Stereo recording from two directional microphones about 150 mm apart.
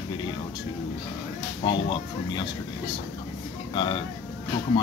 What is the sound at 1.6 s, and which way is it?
Speech, 35° left (ahead or behind).